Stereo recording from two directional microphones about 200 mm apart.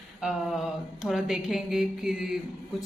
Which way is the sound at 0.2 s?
Centre (ahead or behind).